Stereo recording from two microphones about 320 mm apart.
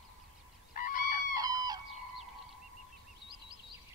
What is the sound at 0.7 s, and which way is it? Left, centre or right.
Goose, left.